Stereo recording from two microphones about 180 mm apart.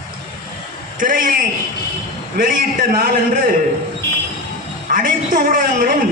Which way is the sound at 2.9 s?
50° right (ahead or behind).